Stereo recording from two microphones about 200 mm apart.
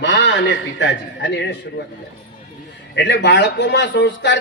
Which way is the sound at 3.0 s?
60° left (ahead or behind).